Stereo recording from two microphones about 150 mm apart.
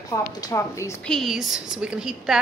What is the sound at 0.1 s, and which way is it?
Speech, 20° left (ahead or behind).